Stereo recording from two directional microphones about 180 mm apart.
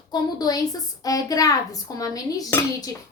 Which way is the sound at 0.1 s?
20° left (ahead or behind).